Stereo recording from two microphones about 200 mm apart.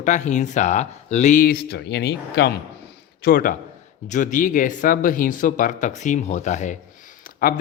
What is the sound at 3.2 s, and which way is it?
Speech, 45° left (ahead or behind).